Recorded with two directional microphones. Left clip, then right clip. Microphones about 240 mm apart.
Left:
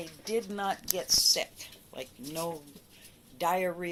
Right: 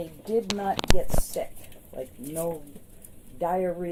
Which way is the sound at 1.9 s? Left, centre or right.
Left.